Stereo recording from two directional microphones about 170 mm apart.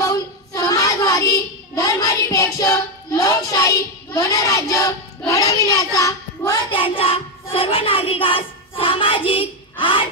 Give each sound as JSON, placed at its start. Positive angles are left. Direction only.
{"t": 0.0, "sound": "child singing", "side_deg": 20}